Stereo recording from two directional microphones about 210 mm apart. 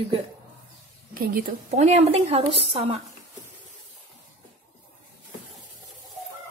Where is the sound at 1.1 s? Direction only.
45° right (ahead or behind).